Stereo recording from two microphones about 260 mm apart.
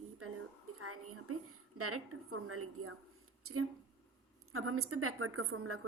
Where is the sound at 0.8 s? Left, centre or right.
Right.